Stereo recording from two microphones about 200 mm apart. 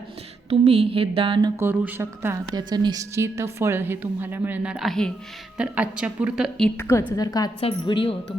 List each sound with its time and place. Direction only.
0.5 s a sound: 30° right (ahead or behind)
1.5 s a woman's voice: 10° right (ahead or behind)
6.7 s a woman's voice: 10° left (ahead or behind)